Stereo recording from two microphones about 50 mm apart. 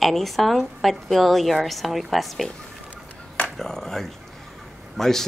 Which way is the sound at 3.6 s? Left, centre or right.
Centre.